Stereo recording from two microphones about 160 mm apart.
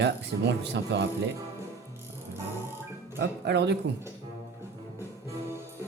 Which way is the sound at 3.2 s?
90° right.